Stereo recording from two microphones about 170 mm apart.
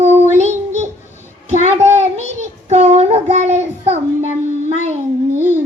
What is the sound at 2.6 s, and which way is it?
Child singing, 40° right (ahead or behind).